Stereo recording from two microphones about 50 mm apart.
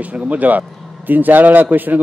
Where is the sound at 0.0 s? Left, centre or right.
Right.